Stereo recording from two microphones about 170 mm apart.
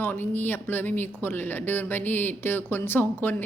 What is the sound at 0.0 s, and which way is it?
A woman's voice, 10° left (ahead or behind).